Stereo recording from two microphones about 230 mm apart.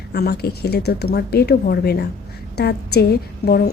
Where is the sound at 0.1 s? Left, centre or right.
Left.